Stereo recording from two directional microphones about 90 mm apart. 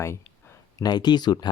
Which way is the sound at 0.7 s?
50° left (ahead or behind).